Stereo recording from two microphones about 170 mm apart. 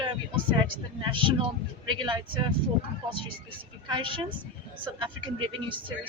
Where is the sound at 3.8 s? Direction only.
30° right (ahead or behind).